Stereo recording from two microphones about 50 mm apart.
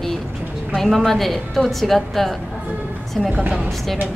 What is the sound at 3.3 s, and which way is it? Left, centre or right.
Speech, right.